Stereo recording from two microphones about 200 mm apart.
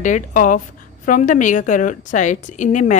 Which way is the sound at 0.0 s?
40° left (ahead or behind).